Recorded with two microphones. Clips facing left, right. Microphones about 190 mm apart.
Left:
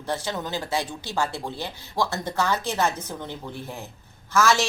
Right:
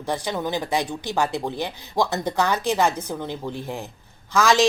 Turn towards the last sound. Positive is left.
turn(degrees=-15)  # may be behind; listen again after turning